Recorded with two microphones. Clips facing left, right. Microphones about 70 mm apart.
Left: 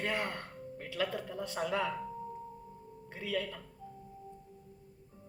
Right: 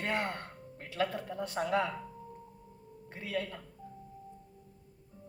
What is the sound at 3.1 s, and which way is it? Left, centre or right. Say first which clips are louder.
Speech: even; right.